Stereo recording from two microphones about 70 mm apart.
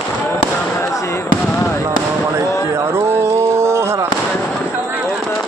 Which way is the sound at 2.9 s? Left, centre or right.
Right.